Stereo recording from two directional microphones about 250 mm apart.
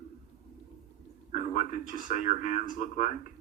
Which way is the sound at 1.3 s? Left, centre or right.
Left.